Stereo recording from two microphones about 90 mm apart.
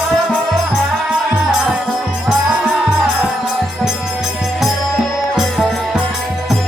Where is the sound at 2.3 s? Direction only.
5° right (ahead or behind).